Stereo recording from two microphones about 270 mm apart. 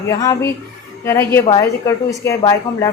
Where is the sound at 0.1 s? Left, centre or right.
Centre.